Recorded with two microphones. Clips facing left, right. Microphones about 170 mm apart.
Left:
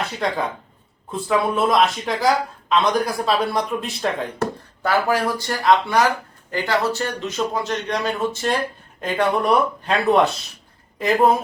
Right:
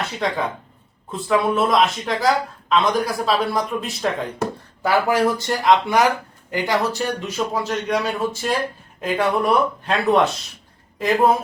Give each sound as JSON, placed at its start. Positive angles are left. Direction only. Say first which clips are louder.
{"t": 0.2, "sound": "speech", "louder": "right 1 dB", "side_deg": 0}
{"t": 4.4, "sound": "speech", "louder": "left 1 dB", "side_deg": -15}